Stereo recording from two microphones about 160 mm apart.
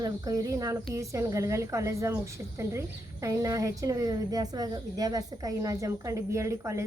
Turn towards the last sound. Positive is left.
turn(degrees=-20)  # may be behind; listen again after turning